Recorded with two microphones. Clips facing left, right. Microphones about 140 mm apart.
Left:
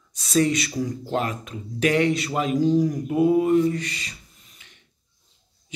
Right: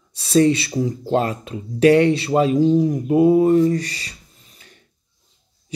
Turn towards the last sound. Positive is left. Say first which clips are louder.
# right 4 dB
turn(degrees=-35)  # may be behind; listen again after turning